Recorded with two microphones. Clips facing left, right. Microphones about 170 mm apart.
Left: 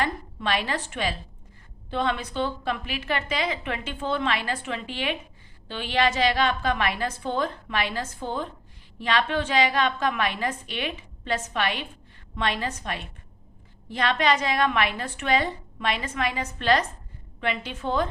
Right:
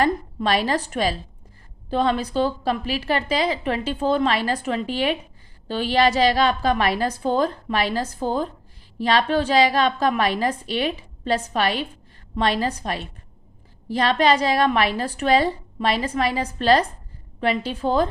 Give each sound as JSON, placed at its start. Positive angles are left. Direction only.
{"t": 0.0, "sound": "a woman's voice", "side_deg": -40}